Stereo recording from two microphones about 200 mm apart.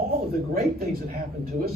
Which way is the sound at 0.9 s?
50° right (ahead or behind).